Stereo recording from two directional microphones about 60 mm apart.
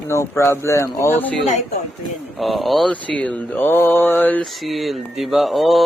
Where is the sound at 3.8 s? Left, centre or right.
Left.